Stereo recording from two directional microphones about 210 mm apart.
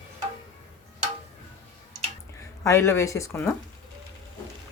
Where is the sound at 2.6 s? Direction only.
15° left (ahead or behind).